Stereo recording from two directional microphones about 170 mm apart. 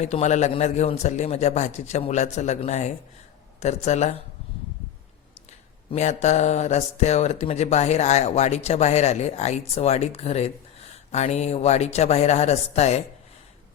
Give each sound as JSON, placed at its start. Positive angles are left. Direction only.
{"t": 0.0, "sound": "speech", "side_deg": 40}
{"t": 5.5, "sound": "speech", "side_deg": 40}